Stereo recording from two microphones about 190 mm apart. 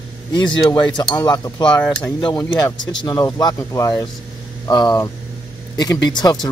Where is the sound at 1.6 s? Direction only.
5° left (ahead or behind).